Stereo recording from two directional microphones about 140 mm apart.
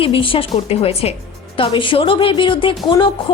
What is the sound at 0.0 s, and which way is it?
A woman's voice, 40° left (ahead or behind).